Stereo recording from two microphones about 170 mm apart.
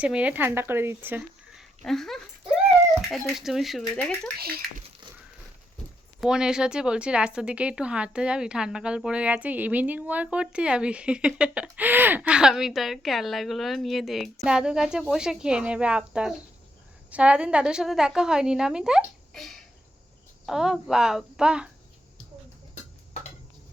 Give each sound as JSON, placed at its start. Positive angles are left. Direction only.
{"t": 0.0, "sound": "speech", "side_deg": -5}
{"t": 1.8, "sound": "a woman's voice", "side_deg": 0}
{"t": 4.4, "sound": "speech", "side_deg": -65}
{"t": 6.1, "sound": "a woman's voice", "side_deg": -5}